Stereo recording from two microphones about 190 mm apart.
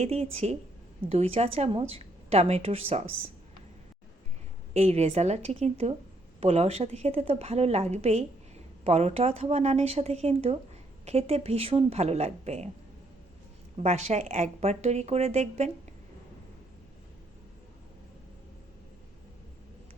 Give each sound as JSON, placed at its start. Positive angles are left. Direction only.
{"t": 0.0, "sound": "a woman's voice", "side_deg": -35}
{"t": 4.7, "sound": "a woman's voice", "side_deg": -35}
{"t": 13.7, "sound": "a woman's voice", "side_deg": -35}